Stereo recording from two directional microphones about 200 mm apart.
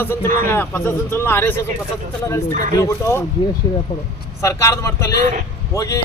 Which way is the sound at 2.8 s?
15° left (ahead or behind).